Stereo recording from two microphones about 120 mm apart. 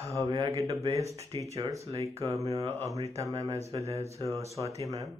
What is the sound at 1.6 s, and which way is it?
Speech, 25° right (ahead or behind).